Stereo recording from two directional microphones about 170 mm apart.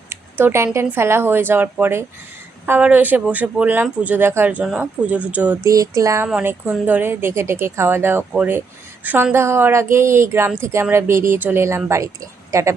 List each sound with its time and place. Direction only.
0.1 s speech: 15° right (ahead or behind)
5.7 s a sound: 20° right (ahead or behind)
6.2 s speech: 10° right (ahead or behind)